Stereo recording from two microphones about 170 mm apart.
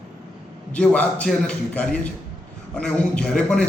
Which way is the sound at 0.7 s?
5° left (ahead or behind).